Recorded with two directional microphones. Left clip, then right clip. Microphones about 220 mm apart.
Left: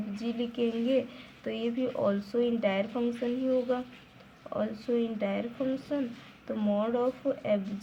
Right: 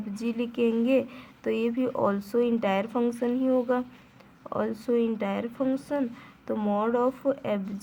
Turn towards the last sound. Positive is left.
turn(degrees=-40)  # may be behind; listen again after turning